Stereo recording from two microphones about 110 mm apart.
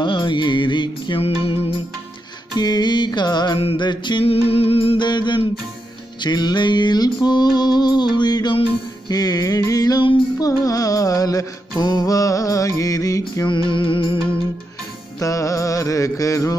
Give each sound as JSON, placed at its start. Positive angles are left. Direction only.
{"t": 0.0, "sound": "music", "side_deg": 45}
{"t": 1.4, "sound": "music", "side_deg": 55}
{"t": 2.6, "sound": "music", "side_deg": 40}
{"t": 4.2, "sound": "music", "side_deg": 60}
{"t": 5.0, "sound": "music", "side_deg": 45}
{"t": 13.7, "sound": "music", "side_deg": 50}
{"t": 15.1, "sound": "music", "side_deg": 30}